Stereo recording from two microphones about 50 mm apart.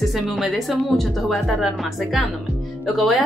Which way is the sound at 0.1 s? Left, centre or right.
Centre.